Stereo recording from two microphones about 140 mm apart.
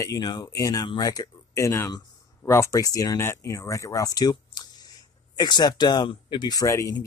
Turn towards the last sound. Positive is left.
turn(degrees=20)  # may be behind; listen again after turning